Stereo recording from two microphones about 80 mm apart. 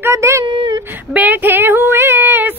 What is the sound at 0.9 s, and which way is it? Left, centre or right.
Speech, centre.